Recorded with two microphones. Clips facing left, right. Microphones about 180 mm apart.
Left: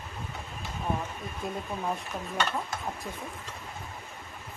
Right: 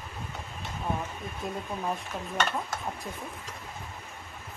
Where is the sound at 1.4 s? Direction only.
Centre (ahead or behind).